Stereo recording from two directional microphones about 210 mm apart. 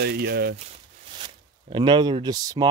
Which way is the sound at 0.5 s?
25° right (ahead or behind).